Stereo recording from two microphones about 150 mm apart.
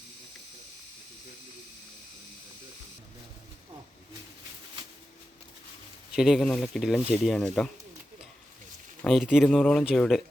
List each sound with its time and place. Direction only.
6.1 s speech: centre (ahead or behind)
9.0 s speech: centre (ahead or behind)